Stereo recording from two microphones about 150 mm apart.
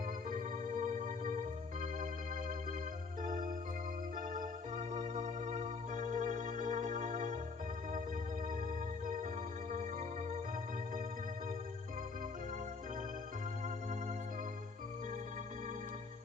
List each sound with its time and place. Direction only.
0.3 s organ: 55° right (ahead or behind)
3.2 s music: 60° right (ahead or behind)
4.2 s organ: 60° right (ahead or behind)
9.0 s music: 65° right (ahead or behind)